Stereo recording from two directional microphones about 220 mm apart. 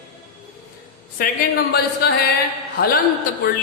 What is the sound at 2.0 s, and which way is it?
Music, 45° left (ahead or behind).